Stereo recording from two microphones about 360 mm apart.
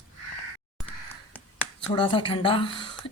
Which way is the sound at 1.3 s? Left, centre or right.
Centre.